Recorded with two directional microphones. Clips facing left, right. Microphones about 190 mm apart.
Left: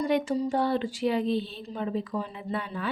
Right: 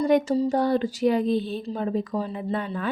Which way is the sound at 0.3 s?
40° right (ahead or behind).